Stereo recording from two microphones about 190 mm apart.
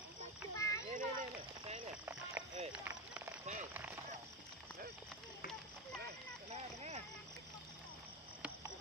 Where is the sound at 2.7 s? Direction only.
10° right (ahead or behind).